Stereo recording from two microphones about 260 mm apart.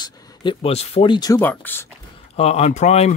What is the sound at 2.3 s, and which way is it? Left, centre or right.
Speech, left.